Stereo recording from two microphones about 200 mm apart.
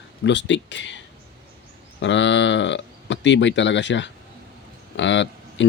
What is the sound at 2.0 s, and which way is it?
Speech, 65° left (ahead or behind).